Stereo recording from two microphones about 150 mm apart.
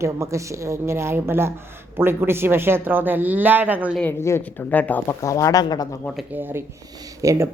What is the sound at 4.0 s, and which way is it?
Speech, 15° left (ahead or behind).